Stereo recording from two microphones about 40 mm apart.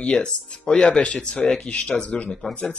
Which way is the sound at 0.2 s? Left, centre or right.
Left.